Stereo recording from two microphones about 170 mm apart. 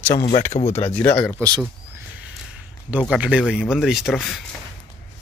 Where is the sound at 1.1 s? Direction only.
10° left (ahead or behind).